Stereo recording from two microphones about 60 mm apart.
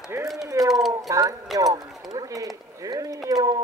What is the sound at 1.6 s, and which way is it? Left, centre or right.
Speech, right.